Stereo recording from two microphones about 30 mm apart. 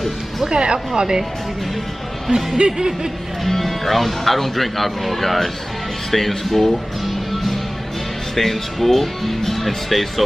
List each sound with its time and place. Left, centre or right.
0.5 s speech: right
2.3 s a sound: right
3.4 s speech: centre
6.7 s music: centre
8.4 s speech: centre